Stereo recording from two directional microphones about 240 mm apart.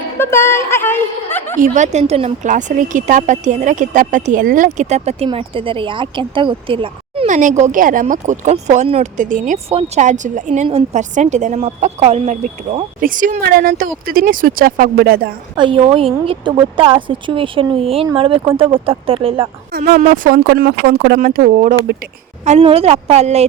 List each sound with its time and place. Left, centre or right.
0.2 s a woman's voice: centre
1.5 s speech: right
15.5 s speech: right
19.7 s speech: right
22.4 s speech: right